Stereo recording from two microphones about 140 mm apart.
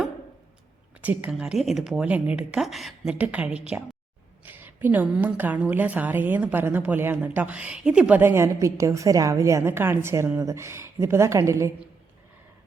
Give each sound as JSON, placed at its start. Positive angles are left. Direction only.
{"t": 1.0, "sound": "a woman's voice", "side_deg": -10}